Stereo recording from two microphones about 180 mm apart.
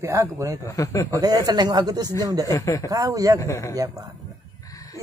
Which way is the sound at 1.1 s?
20° right (ahead or behind).